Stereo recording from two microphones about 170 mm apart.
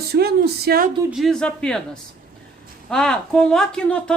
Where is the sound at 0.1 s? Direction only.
70° right (ahead or behind).